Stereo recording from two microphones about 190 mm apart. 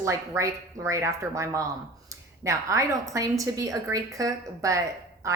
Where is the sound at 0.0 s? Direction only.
15° right (ahead or behind).